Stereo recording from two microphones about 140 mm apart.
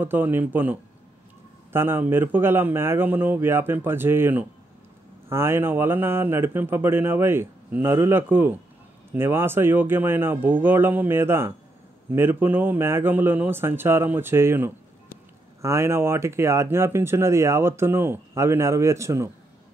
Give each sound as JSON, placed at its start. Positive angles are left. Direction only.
{"t": 0.0, "sound": "speech", "side_deg": -15}